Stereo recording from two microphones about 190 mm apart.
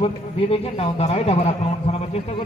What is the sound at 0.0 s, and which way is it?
A man's voice, 30° left (ahead or behind).